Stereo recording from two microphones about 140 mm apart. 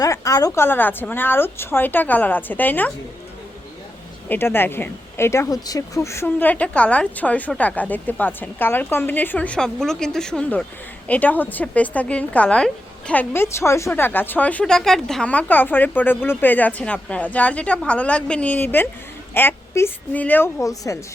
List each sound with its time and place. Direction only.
0.0 s a woman's voice: 25° left (ahead or behind)
4.3 s a woman's voice: 15° left (ahead or behind)